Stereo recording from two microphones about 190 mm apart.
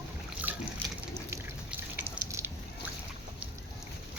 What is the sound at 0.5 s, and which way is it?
Liquid, 10° right (ahead or behind).